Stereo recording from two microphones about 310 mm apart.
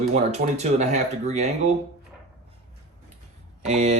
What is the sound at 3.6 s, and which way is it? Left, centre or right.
Speech, right.